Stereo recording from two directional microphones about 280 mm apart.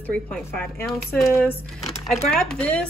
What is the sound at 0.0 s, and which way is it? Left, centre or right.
Speech, centre.